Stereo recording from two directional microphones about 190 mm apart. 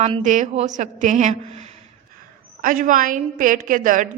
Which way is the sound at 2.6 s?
45° right (ahead or behind).